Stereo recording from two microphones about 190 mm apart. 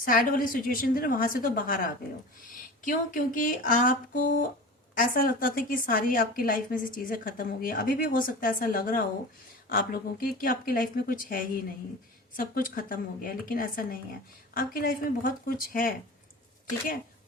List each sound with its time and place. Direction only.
0.0 s a woman's voice: 50° left (ahead or behind)